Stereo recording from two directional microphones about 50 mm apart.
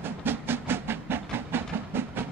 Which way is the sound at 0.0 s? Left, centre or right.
Right.